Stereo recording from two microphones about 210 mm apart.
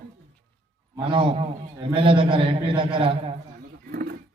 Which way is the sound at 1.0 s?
25° right (ahead or behind).